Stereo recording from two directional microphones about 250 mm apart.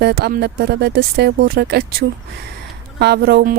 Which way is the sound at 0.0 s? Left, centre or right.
Right.